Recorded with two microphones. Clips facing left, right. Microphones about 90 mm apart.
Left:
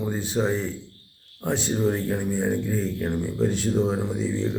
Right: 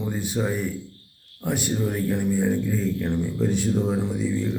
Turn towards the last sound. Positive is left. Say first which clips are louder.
# right 1 dB
turn(degrees=20)  # may be behind; listen again after turning